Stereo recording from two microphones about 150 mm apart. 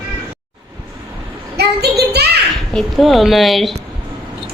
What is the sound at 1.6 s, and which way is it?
Child singing, 90° right.